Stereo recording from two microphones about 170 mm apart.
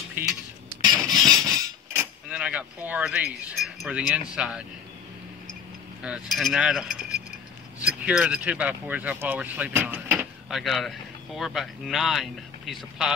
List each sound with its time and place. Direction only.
0.2 s speech: 10° right (ahead or behind)
1.0 s music: centre (ahead or behind)
1.3 s a sound: 20° right (ahead or behind)
2.2 s speech: 5° right (ahead or behind)
6.0 s a sound: centre (ahead or behind)
7.8 s speech: 5° right (ahead or behind)